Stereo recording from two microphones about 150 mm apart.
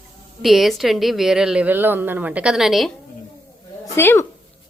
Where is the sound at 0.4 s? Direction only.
Centre (ahead or behind).